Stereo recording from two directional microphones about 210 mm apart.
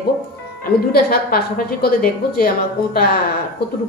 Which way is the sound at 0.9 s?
45° left (ahead or behind).